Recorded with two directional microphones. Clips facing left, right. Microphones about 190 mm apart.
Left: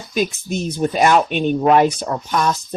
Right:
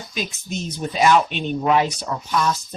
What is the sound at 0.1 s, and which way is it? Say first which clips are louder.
Speech: left 9 dB; 50° left (ahead or behind).